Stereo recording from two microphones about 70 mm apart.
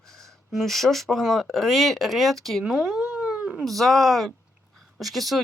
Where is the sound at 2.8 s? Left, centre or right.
Centre.